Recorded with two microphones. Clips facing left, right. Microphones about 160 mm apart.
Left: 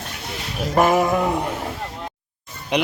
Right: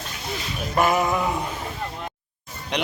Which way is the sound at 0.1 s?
65° left (ahead or behind).